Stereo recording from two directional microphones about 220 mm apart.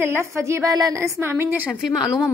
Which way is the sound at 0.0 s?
10° right (ahead or behind).